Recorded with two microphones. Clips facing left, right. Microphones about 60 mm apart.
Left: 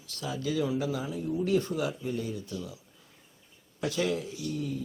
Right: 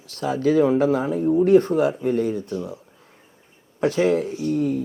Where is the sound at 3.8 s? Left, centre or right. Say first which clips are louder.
Right 11 dB; right.